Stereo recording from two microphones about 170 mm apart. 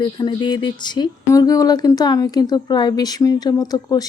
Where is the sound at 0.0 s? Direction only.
25° left (ahead or behind).